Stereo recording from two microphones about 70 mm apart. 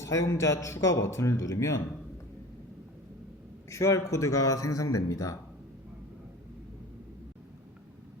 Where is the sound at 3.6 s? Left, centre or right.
Left.